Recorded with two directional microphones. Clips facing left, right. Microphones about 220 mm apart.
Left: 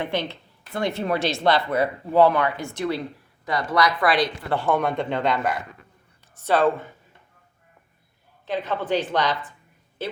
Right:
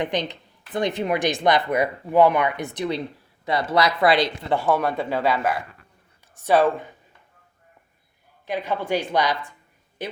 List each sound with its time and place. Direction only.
0.0 s speech: 15° right (ahead or behind)
4.5 s speech: 10° right (ahead or behind)
8.4 s speech: 10° right (ahead or behind)